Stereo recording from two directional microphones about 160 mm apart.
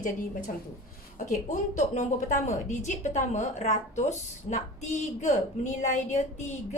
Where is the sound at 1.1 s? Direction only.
50° left (ahead or behind).